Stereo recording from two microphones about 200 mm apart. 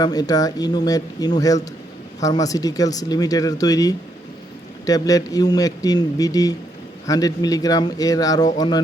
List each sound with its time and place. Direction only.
0.0 s speech: 20° left (ahead or behind)